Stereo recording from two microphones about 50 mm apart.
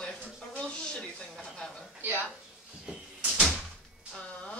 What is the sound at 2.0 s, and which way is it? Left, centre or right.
Speech, right.